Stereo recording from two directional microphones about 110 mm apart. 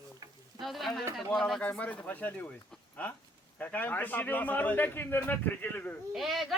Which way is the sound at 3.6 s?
15° left (ahead or behind).